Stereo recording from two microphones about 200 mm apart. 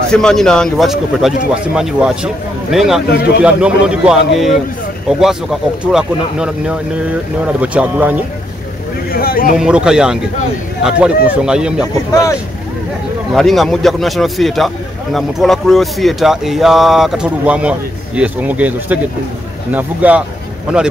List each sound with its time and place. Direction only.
0.1 s speech: 5° left (ahead or behind)
3.1 s a man's voice: 50° left (ahead or behind)
3.4 s speech: 5° right (ahead or behind)
5.2 s speech: centre (ahead or behind)
9.1 s a man's voice: 45° left (ahead or behind)
9.6 s speech: 5° right (ahead or behind)
12.1 s speech: 15° left (ahead or behind)
13.3 s speech: centre (ahead or behind)